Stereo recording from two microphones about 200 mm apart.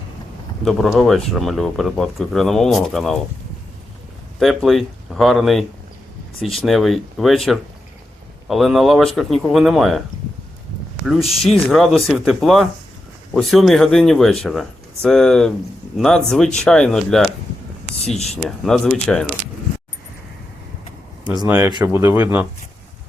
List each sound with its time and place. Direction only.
0.6 s speech: centre (ahead or behind)
4.4 s speech: centre (ahead or behind)
11.4 s speech: centre (ahead or behind)
18.4 s speech: centre (ahead or behind)
21.4 s speech: 10° right (ahead or behind)
21.7 s speech: 20° right (ahead or behind)